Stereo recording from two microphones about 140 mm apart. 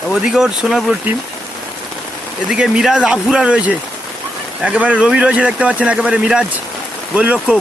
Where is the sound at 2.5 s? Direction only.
5° right (ahead or behind).